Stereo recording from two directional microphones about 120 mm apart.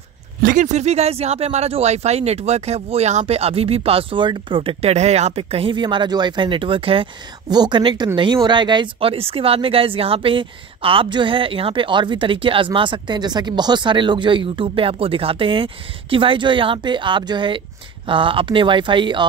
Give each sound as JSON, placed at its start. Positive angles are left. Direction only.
{"t": 0.6, "sound": "speech", "side_deg": -70}
{"t": 4.9, "sound": "speech", "side_deg": -65}
{"t": 5.4, "sound": "speech", "side_deg": -50}
{"t": 7.4, "sound": "speech", "side_deg": -35}